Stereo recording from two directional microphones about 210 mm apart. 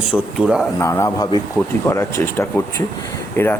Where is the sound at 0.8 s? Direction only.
15° left (ahead or behind).